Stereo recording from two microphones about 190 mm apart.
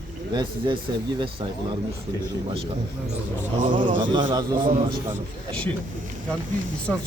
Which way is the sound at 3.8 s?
25° right (ahead or behind).